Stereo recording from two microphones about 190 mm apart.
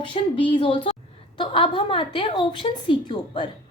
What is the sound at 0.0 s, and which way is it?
A woman's voice, 25° left (ahead or behind).